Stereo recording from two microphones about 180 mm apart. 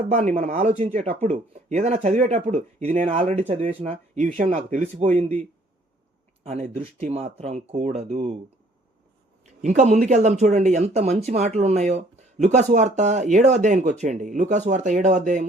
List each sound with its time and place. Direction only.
0.1 s speech: 35° right (ahead or behind)
6.4 s speech: 35° right (ahead or behind)
9.6 s speech: 40° right (ahead or behind)